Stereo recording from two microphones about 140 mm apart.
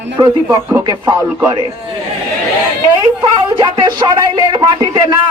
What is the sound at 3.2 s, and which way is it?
Speech, 35° right (ahead or behind).